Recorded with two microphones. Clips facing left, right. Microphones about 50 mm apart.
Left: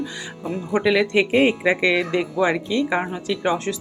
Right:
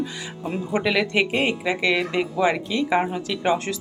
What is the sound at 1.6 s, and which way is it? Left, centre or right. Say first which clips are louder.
Speech: left 4 dB; centre.